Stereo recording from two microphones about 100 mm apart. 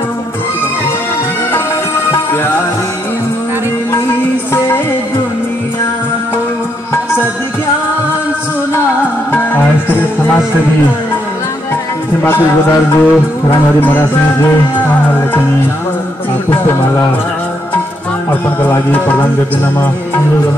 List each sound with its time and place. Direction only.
2.3 s music: 20° left (ahead or behind)
9.3 s music: 20° left (ahead or behind)
12.9 s music: 20° left (ahead or behind)
18.6 s speech: 20° left (ahead or behind)